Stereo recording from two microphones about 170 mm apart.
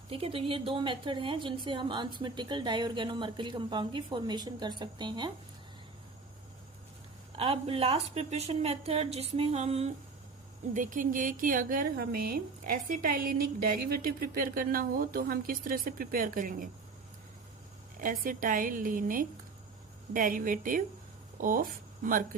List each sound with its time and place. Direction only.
0.1 s a woman's voice: 35° right (ahead or behind)
7.3 s a woman's voice: 35° right (ahead or behind)
10.8 s speech: 50° right (ahead or behind)
18.0 s a woman's voice: 55° right (ahead or behind)